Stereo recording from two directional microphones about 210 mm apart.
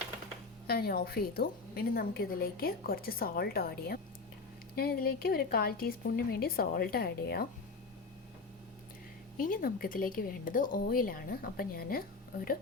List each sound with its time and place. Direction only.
0.7 s a woman's voice: 45° left (ahead or behind)
9.4 s a woman's voice: 40° left (ahead or behind)